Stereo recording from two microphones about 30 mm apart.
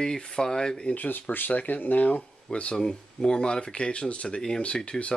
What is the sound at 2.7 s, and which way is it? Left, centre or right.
Speech, left.